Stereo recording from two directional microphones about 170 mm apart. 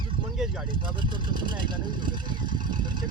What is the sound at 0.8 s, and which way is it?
Speech, 30° right (ahead or behind).